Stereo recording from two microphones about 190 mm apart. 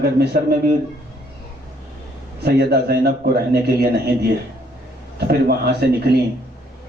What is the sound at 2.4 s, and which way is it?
Speech, 55° right (ahead or behind).